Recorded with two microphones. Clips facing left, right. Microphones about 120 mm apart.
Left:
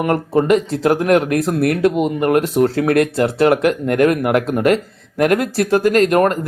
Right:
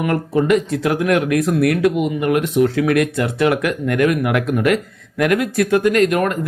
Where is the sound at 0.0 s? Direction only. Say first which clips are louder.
Left 2 dB; 35° left (ahead or behind).